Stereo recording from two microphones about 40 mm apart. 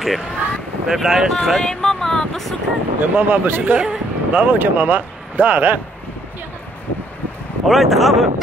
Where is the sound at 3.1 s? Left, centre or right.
Right.